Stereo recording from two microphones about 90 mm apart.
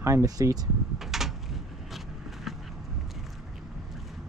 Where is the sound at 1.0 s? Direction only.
5° right (ahead or behind).